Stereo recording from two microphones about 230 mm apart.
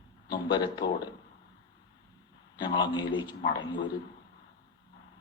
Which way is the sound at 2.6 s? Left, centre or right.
Centre.